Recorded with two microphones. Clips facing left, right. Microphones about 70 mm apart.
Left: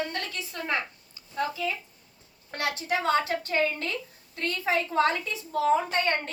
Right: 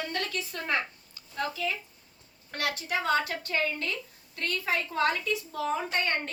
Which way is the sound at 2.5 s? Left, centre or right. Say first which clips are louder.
Left 3 dB; left.